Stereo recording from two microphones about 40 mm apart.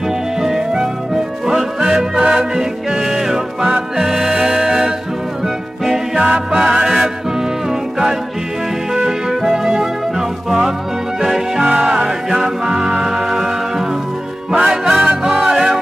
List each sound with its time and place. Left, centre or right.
0.4 s music: centre
8.9 s music: centre